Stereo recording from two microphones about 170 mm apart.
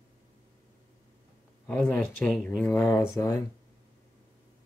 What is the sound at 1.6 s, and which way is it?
Speech, 10° left (ahead or behind).